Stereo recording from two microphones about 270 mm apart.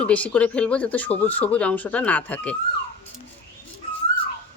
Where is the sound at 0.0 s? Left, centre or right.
Centre.